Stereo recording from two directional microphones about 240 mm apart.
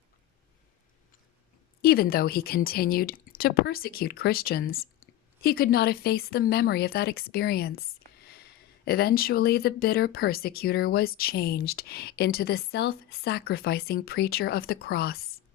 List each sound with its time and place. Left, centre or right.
1.8 s speech: left